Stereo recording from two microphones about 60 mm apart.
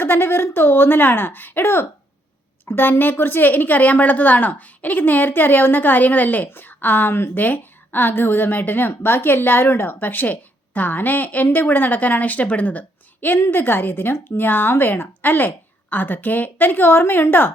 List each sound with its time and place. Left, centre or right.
0.0 s a woman's voice: left
13.4 s a woman's voice: left